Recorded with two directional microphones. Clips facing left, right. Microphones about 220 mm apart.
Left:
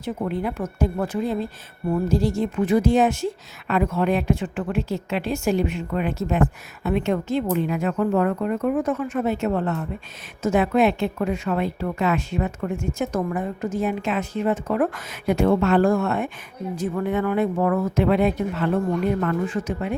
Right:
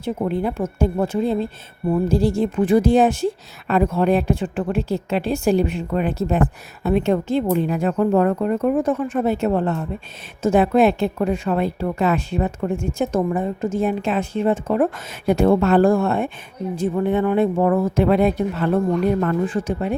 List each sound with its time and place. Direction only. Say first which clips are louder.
0.0 s a woman's voice: right 4 dB; 30° right (ahead or behind)